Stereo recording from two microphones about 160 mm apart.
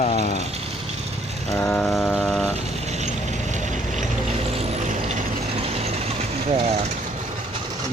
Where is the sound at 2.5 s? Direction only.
45° right (ahead or behind).